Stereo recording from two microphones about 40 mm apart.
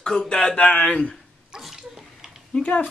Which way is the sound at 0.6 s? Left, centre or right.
Left.